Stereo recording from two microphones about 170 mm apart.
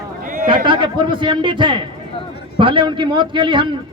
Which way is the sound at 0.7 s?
25° right (ahead or behind).